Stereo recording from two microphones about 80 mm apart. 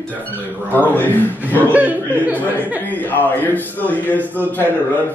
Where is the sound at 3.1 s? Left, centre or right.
Left.